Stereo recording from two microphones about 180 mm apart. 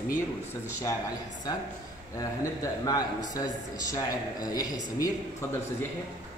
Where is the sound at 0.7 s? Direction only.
15° left (ahead or behind).